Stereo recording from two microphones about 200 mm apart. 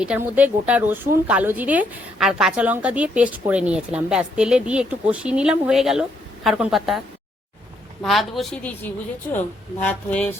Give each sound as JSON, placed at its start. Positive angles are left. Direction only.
{"t": 0.0, "sound": "a woman's voice", "side_deg": -5}
{"t": 8.0, "sound": "a woman's voice", "side_deg": 0}